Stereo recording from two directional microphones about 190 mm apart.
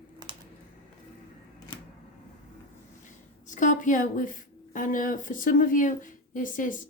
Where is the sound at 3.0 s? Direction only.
40° left (ahead or behind).